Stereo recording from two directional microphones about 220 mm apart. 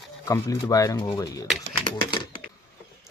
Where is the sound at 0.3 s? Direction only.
15° left (ahead or behind).